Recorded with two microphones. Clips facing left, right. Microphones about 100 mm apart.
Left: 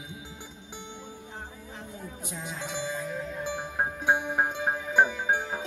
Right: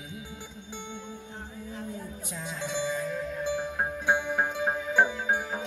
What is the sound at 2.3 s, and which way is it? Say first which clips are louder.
Music: right 3 dB; 15° left (ahead or behind).